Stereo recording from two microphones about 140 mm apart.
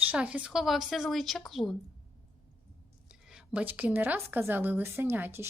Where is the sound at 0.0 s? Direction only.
10° right (ahead or behind).